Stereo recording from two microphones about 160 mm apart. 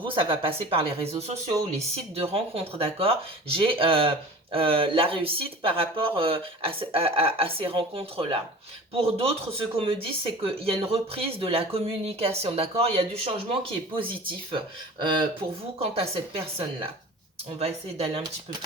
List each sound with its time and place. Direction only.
0.0 s speech: 35° right (ahead or behind)